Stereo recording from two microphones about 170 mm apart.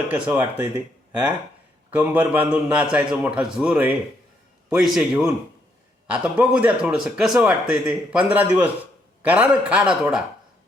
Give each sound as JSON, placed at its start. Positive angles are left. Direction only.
{"t": 0.3, "sound": "speech", "side_deg": -15}
{"t": 1.9, "sound": "a man's voice", "side_deg": -10}